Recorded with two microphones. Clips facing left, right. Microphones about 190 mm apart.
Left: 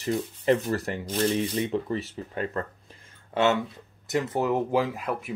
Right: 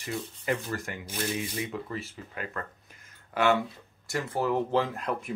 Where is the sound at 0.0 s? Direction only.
35° left (ahead or behind).